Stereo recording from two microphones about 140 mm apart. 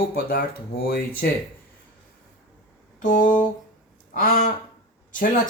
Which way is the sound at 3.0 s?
70° left (ahead or behind).